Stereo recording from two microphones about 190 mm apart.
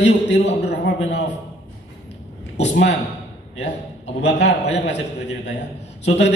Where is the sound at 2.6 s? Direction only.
65° left (ahead or behind).